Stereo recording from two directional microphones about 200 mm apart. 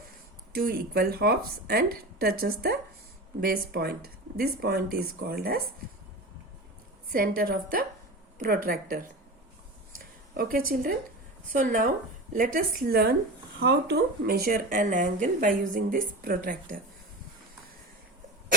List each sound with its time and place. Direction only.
0.5 s speech: 50° right (ahead or behind)
7.1 s speech: 45° right (ahead or behind)
10.3 s speech: 45° right (ahead or behind)